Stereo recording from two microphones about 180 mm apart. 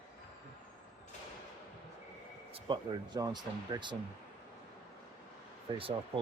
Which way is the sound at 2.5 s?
30° right (ahead or behind).